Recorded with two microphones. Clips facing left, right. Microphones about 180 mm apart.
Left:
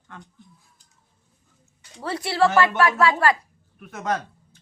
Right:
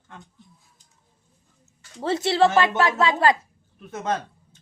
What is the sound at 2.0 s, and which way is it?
A woman's voice, 25° right (ahead or behind).